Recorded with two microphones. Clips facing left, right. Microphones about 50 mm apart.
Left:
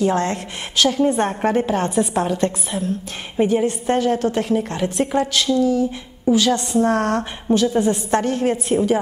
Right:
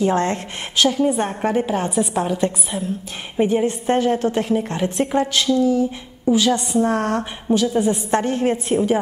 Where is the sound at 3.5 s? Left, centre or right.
Right.